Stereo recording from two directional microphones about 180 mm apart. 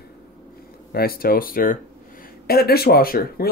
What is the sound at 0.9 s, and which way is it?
Speech, 55° left (ahead or behind).